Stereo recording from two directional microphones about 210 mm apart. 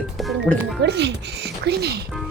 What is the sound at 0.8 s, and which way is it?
Speech, 55° right (ahead or behind).